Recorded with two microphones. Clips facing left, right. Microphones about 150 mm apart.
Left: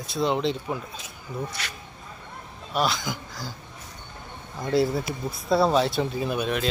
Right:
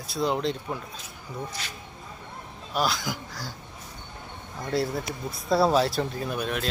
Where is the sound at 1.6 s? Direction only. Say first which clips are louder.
Left 2 dB; 75° left (ahead or behind).